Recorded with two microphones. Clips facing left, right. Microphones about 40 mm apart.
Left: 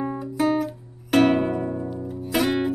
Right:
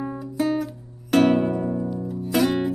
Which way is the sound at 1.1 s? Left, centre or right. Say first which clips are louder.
Even; centre.